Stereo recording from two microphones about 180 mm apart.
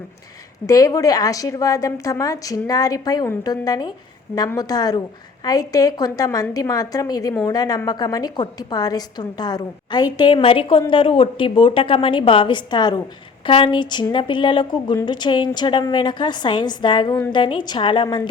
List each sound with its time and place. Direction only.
0.7 s a woman's voice: 20° left (ahead or behind)